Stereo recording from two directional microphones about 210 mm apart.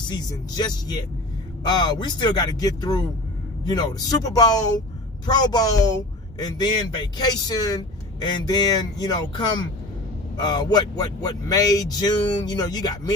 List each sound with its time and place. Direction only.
0.1 s a man's voice: 20° left (ahead or behind)